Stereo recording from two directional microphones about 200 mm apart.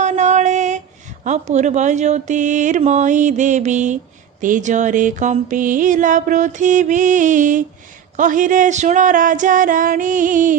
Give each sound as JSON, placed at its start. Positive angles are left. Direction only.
{"t": 0.0, "sound": "a woman's voice", "side_deg": -35}
{"t": 8.2, "sound": "music", "side_deg": -40}